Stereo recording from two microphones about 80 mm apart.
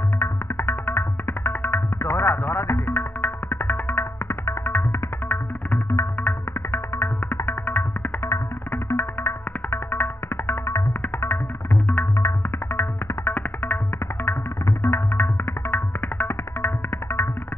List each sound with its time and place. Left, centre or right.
0.2 s music: left
8.8 s music: left
14.8 s music: left